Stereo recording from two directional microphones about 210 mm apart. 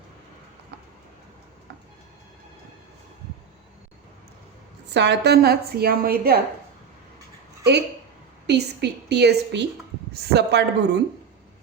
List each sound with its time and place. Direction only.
4.9 s a woman's voice: 55° right (ahead or behind)
8.4 s a woman's voice: 50° right (ahead or behind)